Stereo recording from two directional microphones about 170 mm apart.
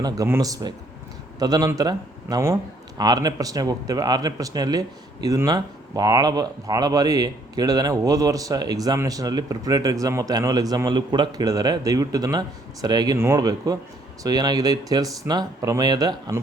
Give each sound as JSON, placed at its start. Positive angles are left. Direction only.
{"t": 0.0, "sound": "speech", "side_deg": -20}